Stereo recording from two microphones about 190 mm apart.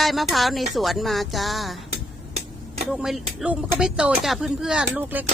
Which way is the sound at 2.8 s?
Centre (ahead or behind).